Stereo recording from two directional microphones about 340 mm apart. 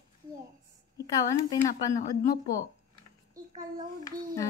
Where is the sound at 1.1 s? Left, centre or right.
Centre.